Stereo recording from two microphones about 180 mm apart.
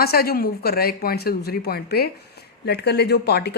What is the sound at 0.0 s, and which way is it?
Speech, 60° left (ahead or behind).